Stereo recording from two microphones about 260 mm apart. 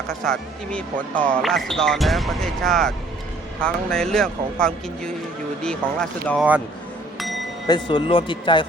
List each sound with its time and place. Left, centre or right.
0.1 s speech: centre
7.7 s speech: centre